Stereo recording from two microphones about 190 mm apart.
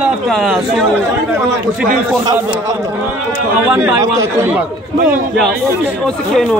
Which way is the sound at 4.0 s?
15° right (ahead or behind).